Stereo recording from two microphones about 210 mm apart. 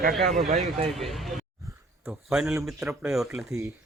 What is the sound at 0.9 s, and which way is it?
Speech, centre (ahead or behind).